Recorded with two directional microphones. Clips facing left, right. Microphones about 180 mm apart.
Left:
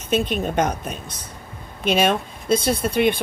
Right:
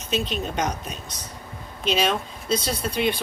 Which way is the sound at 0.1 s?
55° left (ahead or behind).